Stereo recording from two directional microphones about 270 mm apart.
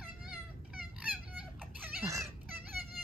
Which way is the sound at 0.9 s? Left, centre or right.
Centre.